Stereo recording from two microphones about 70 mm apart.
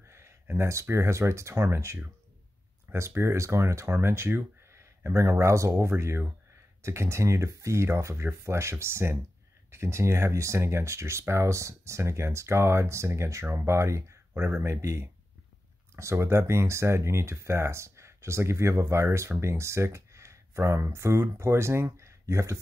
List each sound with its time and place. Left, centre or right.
0.0 s speech: right
3.2 s speech: right
14.3 s speech: right